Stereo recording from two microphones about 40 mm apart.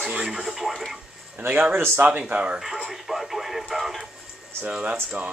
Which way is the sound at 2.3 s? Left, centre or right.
Right.